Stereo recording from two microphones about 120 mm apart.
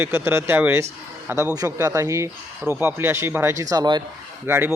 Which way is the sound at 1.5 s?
30° right (ahead or behind).